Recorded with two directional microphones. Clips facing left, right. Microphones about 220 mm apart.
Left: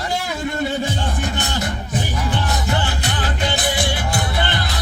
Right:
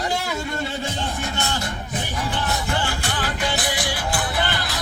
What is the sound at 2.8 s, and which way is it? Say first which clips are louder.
Music: left 2 dB; 20° left (ahead or behind).